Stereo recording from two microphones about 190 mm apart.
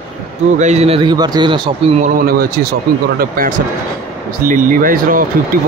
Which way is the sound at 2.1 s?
50° right (ahead or behind).